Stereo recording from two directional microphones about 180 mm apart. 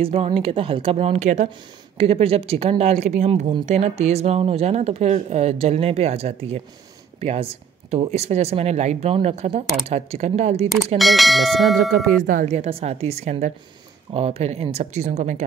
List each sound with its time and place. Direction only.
0.0 s speech: 30° right (ahead or behind)
11.0 s speech: centre (ahead or behind)
12.3 s speech: 45° right (ahead or behind)